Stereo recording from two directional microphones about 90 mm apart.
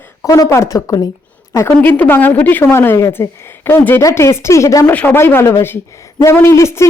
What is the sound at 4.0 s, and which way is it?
Speech, 35° left (ahead or behind).